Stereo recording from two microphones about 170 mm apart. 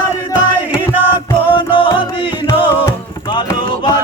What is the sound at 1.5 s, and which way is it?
Music, 30° left (ahead or behind).